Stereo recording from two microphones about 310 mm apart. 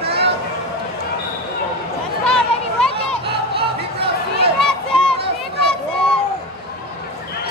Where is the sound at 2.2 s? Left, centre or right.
Centre.